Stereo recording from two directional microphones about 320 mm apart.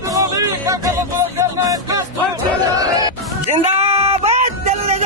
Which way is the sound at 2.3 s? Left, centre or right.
Centre.